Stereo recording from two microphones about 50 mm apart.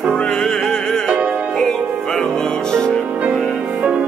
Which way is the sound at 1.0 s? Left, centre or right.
Right.